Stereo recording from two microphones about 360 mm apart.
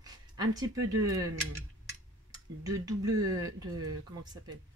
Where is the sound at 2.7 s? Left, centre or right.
Centre.